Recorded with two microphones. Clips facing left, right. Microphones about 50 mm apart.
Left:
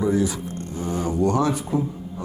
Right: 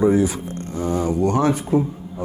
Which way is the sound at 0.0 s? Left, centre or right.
Right.